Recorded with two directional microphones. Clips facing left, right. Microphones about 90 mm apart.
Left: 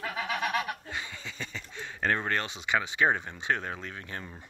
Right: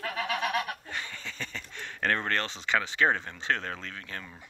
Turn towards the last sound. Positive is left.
turn(degrees=25)  # may be behind; listen again after turning